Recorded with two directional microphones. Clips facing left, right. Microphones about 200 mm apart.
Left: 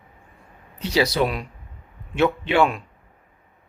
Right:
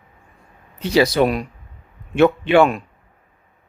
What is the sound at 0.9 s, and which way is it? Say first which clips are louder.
Speech: right 5 dB; 50° right (ahead or behind).